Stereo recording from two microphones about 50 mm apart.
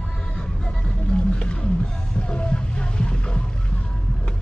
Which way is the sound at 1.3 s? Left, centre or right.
Centre.